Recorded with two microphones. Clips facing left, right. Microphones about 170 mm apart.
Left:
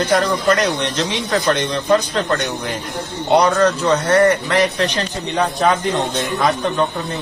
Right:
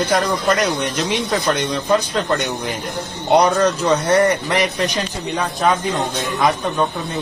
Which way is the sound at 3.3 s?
15° right (ahead or behind).